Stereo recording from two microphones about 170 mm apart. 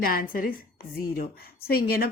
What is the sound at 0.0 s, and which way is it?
A woman's voice, 55° left (ahead or behind).